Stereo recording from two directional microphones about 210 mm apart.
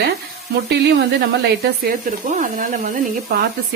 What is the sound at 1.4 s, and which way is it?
Speech, 45° right (ahead or behind).